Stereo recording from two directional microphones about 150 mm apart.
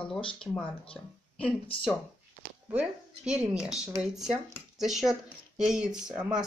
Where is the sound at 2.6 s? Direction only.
5° right (ahead or behind).